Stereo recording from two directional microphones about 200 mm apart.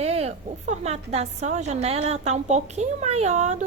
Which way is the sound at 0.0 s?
30° right (ahead or behind).